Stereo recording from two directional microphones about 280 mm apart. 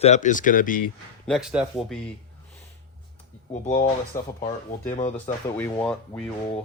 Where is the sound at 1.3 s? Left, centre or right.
Centre.